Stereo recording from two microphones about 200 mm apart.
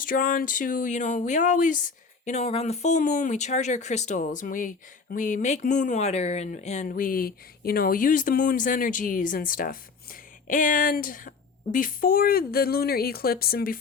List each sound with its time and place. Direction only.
0.0 s speech: 40° left (ahead or behind)